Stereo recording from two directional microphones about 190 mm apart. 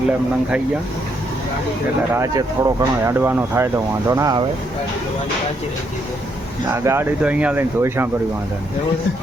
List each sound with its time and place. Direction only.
2.1 s speech: 20° right (ahead or behind)
6.7 s speech: 15° right (ahead or behind)